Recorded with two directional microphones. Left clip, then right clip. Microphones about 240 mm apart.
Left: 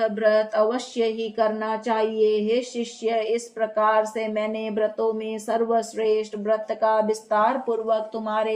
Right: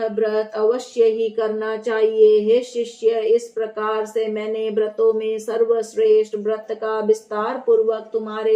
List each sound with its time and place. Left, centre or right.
0.2 s speech: left